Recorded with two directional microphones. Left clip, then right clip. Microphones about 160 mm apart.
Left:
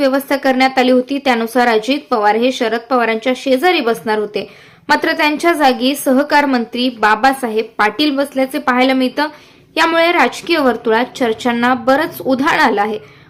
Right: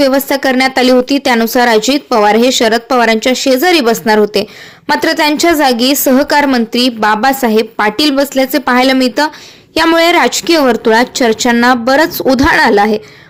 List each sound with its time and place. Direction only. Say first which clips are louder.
0.0 s speech: right 4 dB; 35° right (ahead or behind)